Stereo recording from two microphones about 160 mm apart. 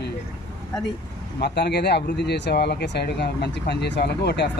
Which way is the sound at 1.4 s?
90° left.